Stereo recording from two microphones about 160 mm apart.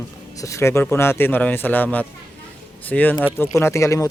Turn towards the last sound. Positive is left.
turn(degrees=20)  # may be behind; listen again after turning